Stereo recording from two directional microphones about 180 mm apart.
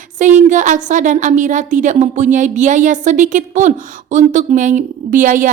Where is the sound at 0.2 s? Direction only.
45° right (ahead or behind).